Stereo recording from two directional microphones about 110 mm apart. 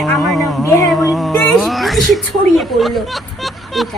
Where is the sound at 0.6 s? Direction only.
25° left (ahead or behind).